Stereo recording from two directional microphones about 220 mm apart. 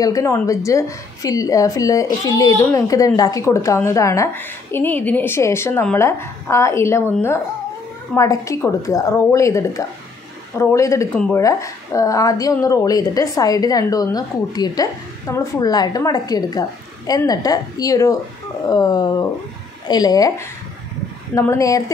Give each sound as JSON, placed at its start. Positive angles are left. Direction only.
{"t": 0.0, "sound": "a woman's voice", "side_deg": 15}